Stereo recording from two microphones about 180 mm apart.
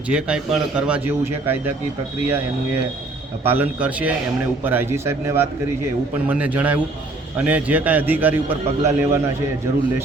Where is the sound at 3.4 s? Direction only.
10° right (ahead or behind).